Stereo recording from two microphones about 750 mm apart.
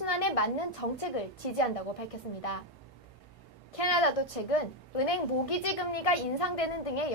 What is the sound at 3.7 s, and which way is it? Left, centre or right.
A child's voice, left.